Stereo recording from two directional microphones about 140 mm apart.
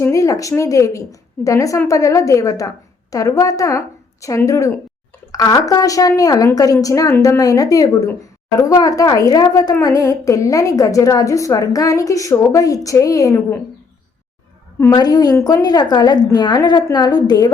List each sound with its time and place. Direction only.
0.0 s a woman's voice: 25° left (ahead or behind)
14.8 s a woman's voice: 25° left (ahead or behind)